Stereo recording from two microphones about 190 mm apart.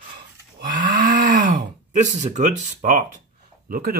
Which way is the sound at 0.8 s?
45° right (ahead or behind).